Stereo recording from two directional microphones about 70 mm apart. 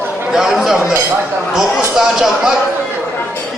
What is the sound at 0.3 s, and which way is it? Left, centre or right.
Speech, centre.